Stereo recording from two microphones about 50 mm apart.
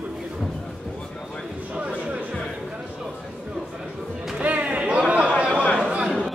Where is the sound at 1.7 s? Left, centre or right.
Right.